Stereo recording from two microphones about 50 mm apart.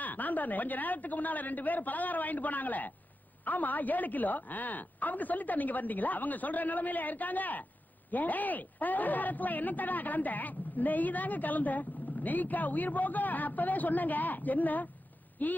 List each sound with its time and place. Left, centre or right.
0.0 s speech: left